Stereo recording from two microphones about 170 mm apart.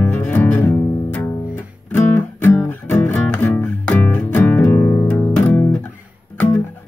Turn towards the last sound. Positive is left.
turn(degrees=10)  # may be behind; listen again after turning